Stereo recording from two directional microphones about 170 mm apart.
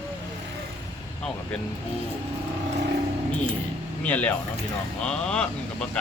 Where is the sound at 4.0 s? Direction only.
10° left (ahead or behind).